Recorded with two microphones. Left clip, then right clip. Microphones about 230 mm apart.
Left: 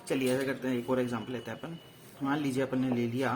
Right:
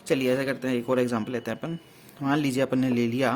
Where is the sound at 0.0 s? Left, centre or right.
Right.